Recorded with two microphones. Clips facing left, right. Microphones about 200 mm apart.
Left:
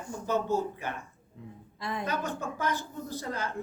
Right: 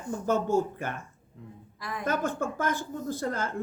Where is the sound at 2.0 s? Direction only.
50° right (ahead or behind).